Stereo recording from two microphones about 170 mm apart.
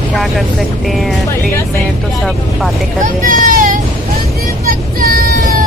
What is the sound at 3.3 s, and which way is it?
Speech, 55° right (ahead or behind).